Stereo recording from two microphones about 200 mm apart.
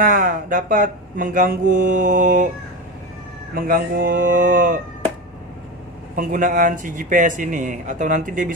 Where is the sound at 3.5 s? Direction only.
45° right (ahead or behind).